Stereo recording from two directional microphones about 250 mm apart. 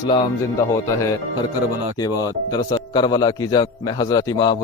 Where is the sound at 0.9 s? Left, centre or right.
Centre.